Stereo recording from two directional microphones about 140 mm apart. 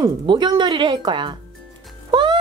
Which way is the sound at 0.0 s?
30° right (ahead or behind).